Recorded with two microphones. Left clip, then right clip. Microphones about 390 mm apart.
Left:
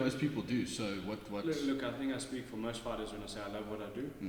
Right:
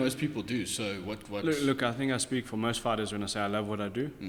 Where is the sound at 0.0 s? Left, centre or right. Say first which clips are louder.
Right 4 dB; right.